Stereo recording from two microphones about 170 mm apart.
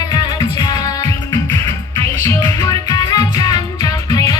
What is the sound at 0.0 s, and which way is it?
Music, 25° left (ahead or behind).